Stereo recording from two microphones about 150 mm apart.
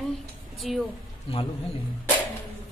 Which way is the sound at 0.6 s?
Centre (ahead or behind).